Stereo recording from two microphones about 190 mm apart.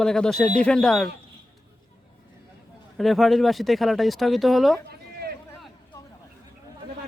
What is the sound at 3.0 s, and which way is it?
A man's voice, centre (ahead or behind).